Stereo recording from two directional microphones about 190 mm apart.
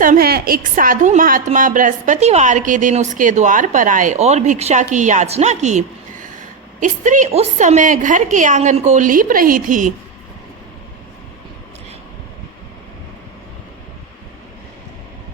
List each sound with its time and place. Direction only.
0.0 s a woman's voice: 50° right (ahead or behind)